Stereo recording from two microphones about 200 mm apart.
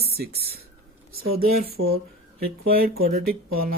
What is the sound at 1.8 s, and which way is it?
Speech, 90° right.